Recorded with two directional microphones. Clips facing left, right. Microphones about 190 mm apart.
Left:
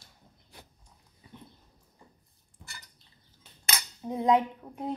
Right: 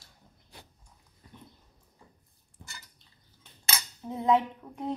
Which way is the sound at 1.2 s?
5° left (ahead or behind).